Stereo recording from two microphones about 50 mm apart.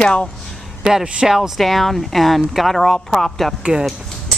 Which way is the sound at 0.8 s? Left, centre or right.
Centre.